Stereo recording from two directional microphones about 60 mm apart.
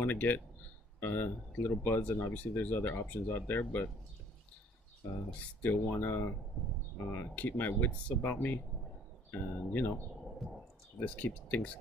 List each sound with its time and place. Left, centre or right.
0.0 s speech: left
5.6 s speech: left
11.0 s speech: left